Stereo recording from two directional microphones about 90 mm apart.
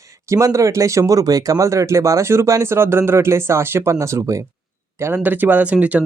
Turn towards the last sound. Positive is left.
turn(degrees=-15)  # may be behind; listen again after turning